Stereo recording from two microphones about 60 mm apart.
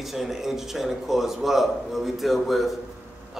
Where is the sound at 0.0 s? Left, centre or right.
Centre.